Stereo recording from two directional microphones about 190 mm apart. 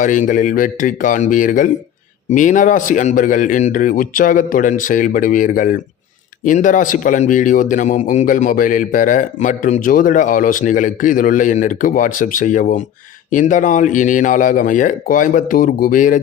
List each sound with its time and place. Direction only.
0.0 s speech: 45° left (ahead or behind)